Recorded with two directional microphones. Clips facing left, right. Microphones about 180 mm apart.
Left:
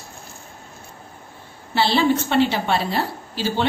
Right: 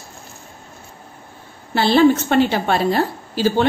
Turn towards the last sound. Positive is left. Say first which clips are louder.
# right 6 dB
turn(degrees=-45)  # may be behind; listen again after turning